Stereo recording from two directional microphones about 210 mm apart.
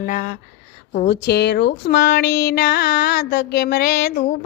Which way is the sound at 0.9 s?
50° left (ahead or behind).